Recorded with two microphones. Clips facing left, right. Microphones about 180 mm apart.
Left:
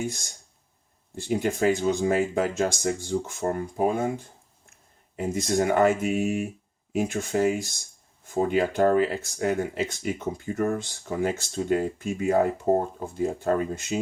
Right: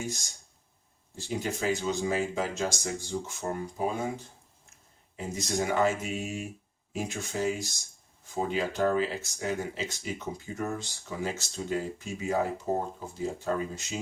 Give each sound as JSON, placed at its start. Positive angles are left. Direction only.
{"t": 0.1, "sound": "speech", "side_deg": 55}
{"t": 5.1, "sound": "speech", "side_deg": 55}